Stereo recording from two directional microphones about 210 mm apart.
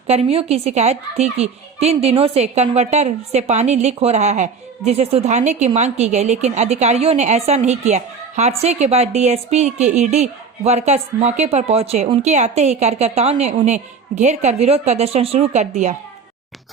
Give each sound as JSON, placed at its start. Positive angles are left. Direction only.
{"t": 0.1, "sound": "a woman's voice", "side_deg": -30}